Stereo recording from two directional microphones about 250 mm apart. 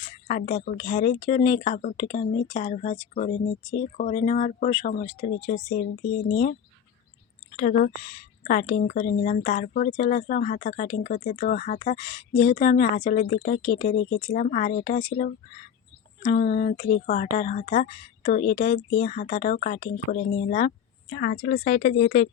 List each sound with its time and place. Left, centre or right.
0.3 s speech: left